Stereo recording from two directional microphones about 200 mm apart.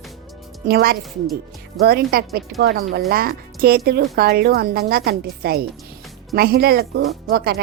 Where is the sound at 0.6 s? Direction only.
50° right (ahead or behind).